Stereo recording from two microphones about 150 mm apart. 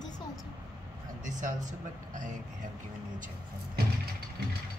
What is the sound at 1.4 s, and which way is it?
Speech, 55° right (ahead or behind).